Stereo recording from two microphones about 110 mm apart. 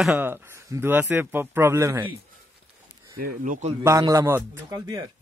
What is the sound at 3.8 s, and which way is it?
A man's voice, 30° right (ahead or behind).